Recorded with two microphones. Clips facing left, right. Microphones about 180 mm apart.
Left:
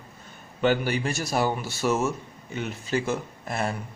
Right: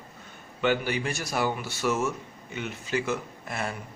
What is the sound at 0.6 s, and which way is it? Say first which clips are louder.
Speech: left 3 dB; 40° left (ahead or behind).